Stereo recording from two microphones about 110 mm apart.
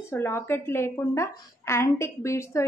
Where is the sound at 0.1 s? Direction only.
25° left (ahead or behind).